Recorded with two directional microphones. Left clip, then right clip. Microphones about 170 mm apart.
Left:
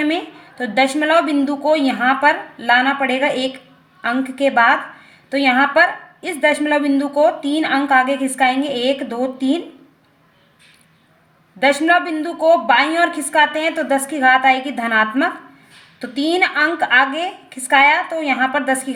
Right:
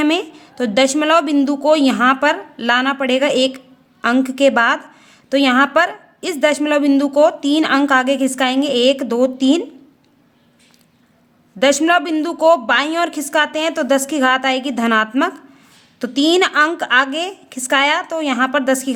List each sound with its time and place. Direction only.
0.6 s a woman's voice: 40° right (ahead or behind)
11.6 s a woman's voice: 45° right (ahead or behind)